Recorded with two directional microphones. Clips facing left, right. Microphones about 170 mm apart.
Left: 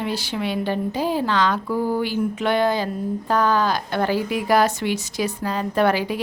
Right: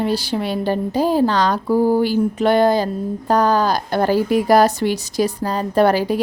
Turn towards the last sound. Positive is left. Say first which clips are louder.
# right 5 dB
turn(degrees=-40)  # may be behind; listen again after turning